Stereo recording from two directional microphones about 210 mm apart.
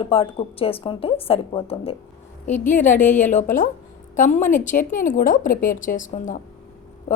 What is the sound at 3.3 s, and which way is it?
A woman's voice, 40° left (ahead or behind).